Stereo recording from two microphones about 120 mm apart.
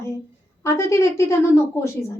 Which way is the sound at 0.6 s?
25° left (ahead or behind).